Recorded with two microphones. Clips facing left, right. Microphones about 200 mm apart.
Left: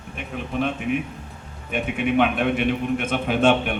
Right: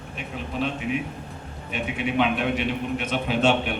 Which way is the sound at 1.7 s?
55° left (ahead or behind).